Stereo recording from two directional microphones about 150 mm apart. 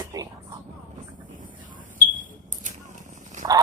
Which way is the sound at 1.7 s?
65° right (ahead or behind).